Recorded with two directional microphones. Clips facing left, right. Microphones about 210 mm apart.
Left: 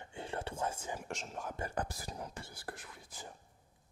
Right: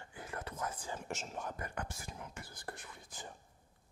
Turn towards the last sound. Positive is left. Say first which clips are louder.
# even
turn(degrees=0)  # may be behind; listen again after turning